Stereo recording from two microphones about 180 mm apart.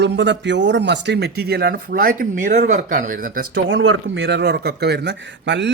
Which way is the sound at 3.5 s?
90° right.